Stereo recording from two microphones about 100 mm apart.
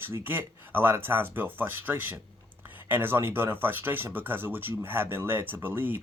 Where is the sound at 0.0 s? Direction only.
20° right (ahead or behind).